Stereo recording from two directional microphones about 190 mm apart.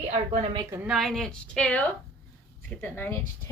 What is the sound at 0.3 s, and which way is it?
Speech, 30° right (ahead or behind).